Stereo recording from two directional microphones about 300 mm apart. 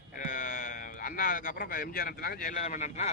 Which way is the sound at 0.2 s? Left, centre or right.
Left.